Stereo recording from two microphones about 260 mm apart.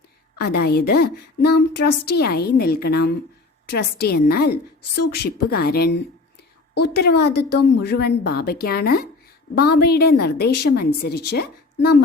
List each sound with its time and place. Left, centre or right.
0.3 s a woman's voice: left